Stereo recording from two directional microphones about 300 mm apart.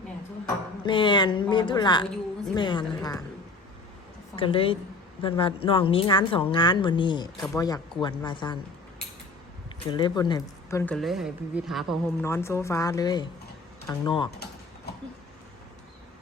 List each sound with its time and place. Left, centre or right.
0.9 s a woman's voice: centre
4.4 s a woman's voice: centre
9.9 s a woman's voice: centre